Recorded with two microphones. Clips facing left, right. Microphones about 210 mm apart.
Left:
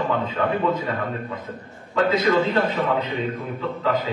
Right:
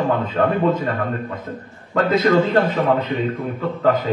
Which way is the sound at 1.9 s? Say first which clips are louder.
Right 3 dB; 50° right (ahead or behind).